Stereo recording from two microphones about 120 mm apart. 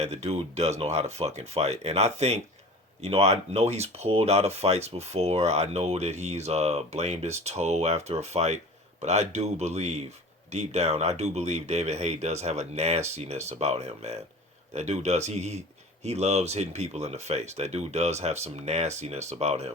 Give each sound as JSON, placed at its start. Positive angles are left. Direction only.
{"t": 0.0, "sound": "speech", "side_deg": -65}